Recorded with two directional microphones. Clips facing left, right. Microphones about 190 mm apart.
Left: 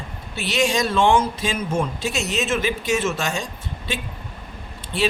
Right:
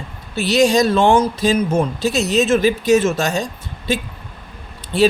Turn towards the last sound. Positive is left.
turn(degrees=-40)  # may be behind; listen again after turning